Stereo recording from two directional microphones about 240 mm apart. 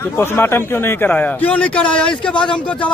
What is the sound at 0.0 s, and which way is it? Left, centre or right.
A man's voice, centre.